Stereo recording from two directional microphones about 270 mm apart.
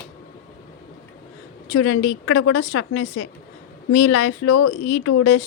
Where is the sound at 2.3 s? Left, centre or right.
Left.